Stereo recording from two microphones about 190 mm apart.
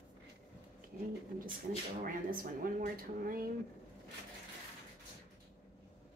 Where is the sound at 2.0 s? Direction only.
45° right (ahead or behind).